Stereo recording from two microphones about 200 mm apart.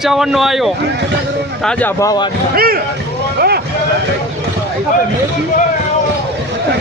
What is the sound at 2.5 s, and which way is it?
Speech, 50° right (ahead or behind).